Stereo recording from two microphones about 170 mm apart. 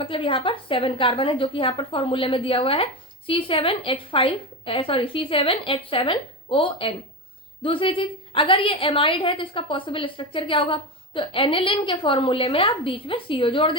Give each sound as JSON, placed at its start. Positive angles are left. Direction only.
{"t": 0.0, "sound": "a woman's voice", "side_deg": 30}